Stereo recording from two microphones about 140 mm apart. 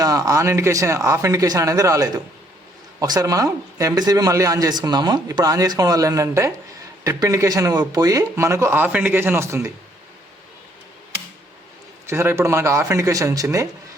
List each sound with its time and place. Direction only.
0.0 s a man's voice: 25° right (ahead or behind)
12.0 s a man's voice: 15° right (ahead or behind)